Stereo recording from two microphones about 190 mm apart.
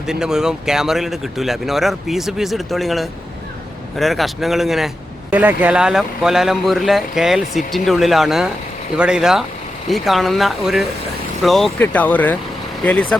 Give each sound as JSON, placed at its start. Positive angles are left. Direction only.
{"t": 0.1, "sound": "speech", "side_deg": -5}